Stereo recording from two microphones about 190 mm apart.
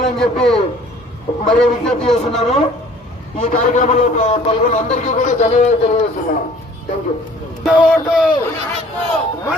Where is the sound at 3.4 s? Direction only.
40° left (ahead or behind).